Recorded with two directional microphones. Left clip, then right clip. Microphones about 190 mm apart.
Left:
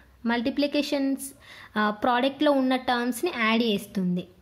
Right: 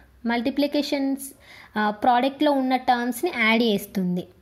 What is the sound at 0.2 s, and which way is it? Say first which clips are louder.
A woman's voice: right 2 dB; 5° right (ahead or behind).